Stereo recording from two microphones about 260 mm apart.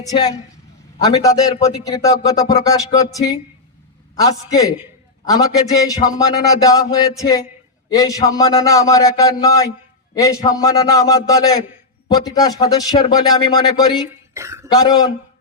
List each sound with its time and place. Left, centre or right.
0.1 s a woman's voice: centre
14.3 s a sound: centre
14.7 s a man's voice: centre